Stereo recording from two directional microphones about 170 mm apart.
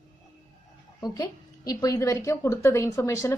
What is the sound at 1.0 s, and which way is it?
A woman's voice, 20° left (ahead or behind).